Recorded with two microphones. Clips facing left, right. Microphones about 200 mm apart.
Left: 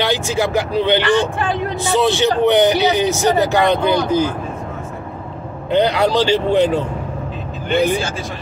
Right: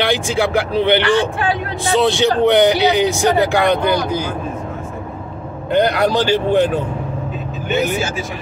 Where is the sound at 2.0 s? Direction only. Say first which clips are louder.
Right 1 dB; 15° right (ahead or behind).